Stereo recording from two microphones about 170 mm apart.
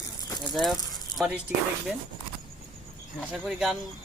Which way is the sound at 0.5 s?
Centre (ahead or behind).